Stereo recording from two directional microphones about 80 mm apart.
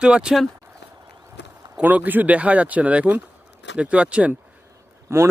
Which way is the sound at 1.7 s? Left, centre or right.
Centre.